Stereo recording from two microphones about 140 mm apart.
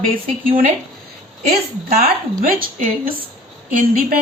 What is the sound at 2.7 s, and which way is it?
Speech, 70° right (ahead or behind).